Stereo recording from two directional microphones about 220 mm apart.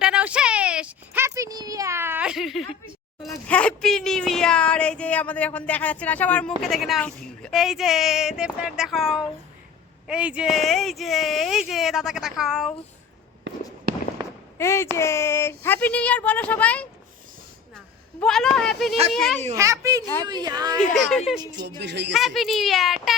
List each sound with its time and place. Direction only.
0.0 s a sound: 5° right (ahead or behind)
3.2 s speech: 5° left (ahead or behind)
13.5 s fireworks: 55° right (ahead or behind)
14.2 s fireworks: 20° right (ahead or behind)
14.6 s speech: 10° left (ahead or behind)
19.5 s a child's voice: 15° right (ahead or behind)
20.7 s speech: centre (ahead or behind)
21.4 s a woman's voice: 20° right (ahead or behind)
21.8 s speech: 50° right (ahead or behind)
22.1 s speech: centre (ahead or behind)